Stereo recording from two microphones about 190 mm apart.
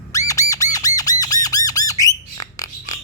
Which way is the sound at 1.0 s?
20° left (ahead or behind).